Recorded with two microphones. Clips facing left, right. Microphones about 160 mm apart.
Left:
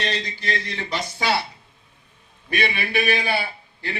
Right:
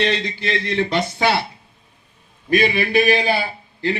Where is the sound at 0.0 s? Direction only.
60° right (ahead or behind).